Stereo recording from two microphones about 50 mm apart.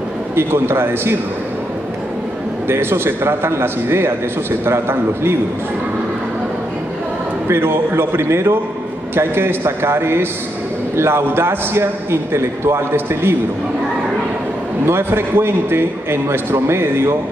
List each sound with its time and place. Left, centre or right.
0.4 s a man's voice: right
2.7 s a man's voice: right
7.4 s a man's voice: right
14.9 s a man's voice: right